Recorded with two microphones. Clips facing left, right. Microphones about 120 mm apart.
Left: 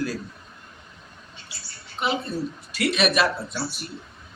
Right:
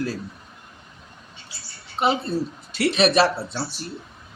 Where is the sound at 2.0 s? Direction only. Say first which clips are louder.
Right 4 dB; 35° right (ahead or behind).